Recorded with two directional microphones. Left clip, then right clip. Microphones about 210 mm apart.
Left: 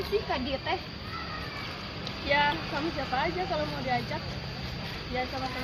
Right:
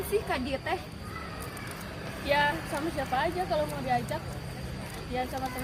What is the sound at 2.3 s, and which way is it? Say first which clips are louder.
Speech: even; 30° right (ahead or behind).